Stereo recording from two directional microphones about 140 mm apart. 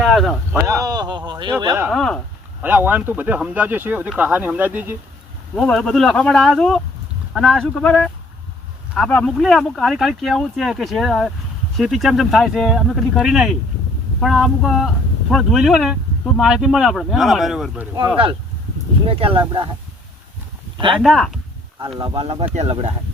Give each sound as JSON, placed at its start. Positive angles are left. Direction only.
{"t": 0.0, "sound": "a sound", "side_deg": 0}
{"t": 0.8, "sound": "speech", "side_deg": -25}
{"t": 1.9, "sound": "speech", "side_deg": 5}
{"t": 2.6, "sound": "speech", "side_deg": -10}
{"t": 5.5, "sound": "speech", "side_deg": 5}
{"t": 19.0, "sound": "speech", "side_deg": -40}
{"t": 20.7, "sound": "speech", "side_deg": -40}
{"t": 21.0, "sound": "speech", "side_deg": 0}
{"t": 21.9, "sound": "speech", "side_deg": -35}